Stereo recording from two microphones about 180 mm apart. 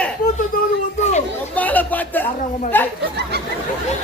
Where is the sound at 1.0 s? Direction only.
40° left (ahead or behind).